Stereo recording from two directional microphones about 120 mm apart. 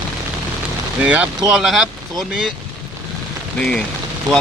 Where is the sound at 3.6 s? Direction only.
10° left (ahead or behind).